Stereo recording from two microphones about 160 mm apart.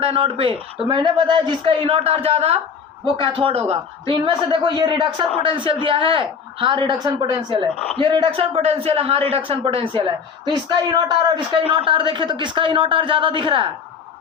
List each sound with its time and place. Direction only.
0.0 s a man's voice: 35° right (ahead or behind)